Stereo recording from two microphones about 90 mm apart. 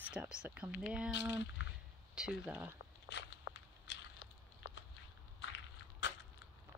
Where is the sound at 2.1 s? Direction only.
10° right (ahead or behind).